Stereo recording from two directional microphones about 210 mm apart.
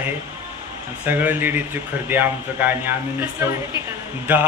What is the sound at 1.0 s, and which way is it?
Speech, 10° right (ahead or behind).